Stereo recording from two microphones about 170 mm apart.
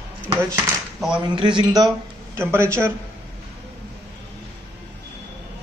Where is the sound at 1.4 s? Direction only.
25° right (ahead or behind).